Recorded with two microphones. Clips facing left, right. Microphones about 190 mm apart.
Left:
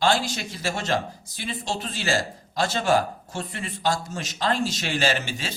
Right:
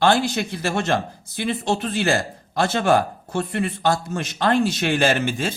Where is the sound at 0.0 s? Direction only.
55° right (ahead or behind).